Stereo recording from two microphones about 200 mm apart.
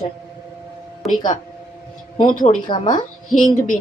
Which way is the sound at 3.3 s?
40° left (ahead or behind).